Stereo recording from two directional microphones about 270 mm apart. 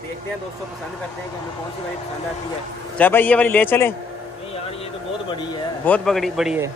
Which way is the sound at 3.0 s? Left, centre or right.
Centre.